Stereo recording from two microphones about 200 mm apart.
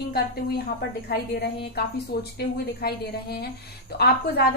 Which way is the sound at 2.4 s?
55° left (ahead or behind).